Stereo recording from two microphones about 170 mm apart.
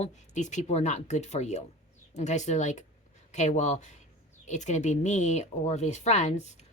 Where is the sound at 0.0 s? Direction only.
45° left (ahead or behind).